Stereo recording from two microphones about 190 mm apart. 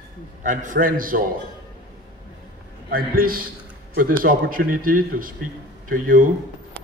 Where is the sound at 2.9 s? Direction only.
50° right (ahead or behind).